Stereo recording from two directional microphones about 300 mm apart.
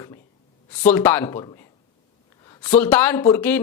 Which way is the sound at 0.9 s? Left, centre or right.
Centre.